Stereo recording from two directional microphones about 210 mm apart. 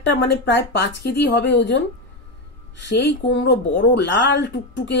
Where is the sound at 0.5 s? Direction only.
55° left (ahead or behind).